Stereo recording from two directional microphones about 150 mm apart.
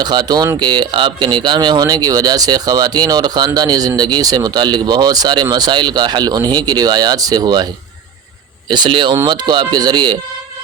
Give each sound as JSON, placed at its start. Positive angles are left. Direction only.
{"t": 0.0, "sound": "speech", "side_deg": -30}
{"t": 8.7, "sound": "speech", "side_deg": -30}